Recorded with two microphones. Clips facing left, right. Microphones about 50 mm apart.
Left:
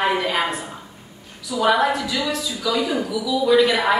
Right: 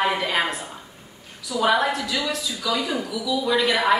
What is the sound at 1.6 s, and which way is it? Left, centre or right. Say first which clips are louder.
Speech: left 2 dB; centre.